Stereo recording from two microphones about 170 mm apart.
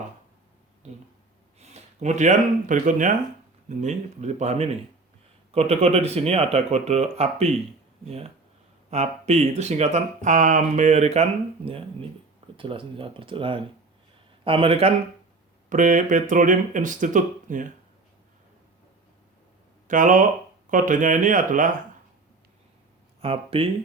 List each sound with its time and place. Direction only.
0.8 s speech: 40° right (ahead or behind)
8.9 s speech: 40° right (ahead or behind)
15.7 s speech: 50° right (ahead or behind)
19.9 s speech: 50° right (ahead or behind)
23.2 s speech: 35° right (ahead or behind)